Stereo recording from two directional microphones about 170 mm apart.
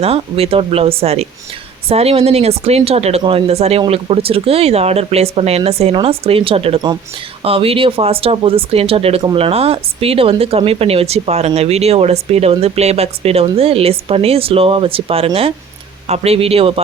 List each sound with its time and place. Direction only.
0.0 s speech: 35° right (ahead or behind)